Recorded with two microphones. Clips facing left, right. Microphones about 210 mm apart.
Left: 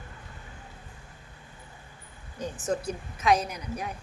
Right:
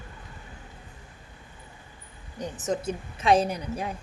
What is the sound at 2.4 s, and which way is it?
A woman's voice, 20° right (ahead or behind).